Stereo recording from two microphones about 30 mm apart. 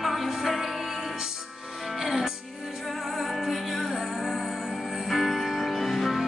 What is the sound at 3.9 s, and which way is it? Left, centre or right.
Music, centre.